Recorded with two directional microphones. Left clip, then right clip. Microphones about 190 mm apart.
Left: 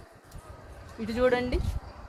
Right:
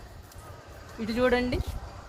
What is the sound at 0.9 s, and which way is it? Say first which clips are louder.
Speech: even; 25° left (ahead or behind).